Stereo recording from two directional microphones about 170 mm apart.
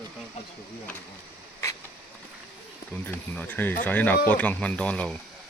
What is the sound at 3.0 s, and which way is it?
Speech, 10° left (ahead or behind).